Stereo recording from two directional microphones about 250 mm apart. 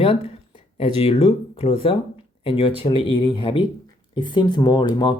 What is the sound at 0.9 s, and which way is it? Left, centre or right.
Speech, left.